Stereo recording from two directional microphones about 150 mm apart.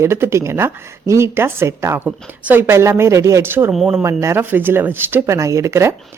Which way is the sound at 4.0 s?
20° right (ahead or behind).